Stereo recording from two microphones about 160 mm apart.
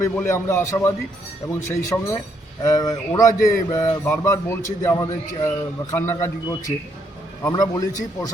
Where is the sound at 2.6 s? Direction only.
20° left (ahead or behind).